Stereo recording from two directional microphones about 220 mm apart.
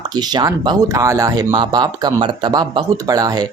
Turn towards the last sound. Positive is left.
turn(degrees=-15)  # may be behind; listen again after turning